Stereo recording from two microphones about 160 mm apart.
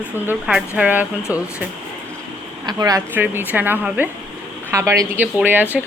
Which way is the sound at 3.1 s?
10° right (ahead or behind).